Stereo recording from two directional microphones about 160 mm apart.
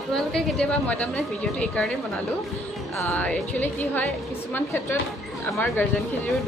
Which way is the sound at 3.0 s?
10° left (ahead or behind).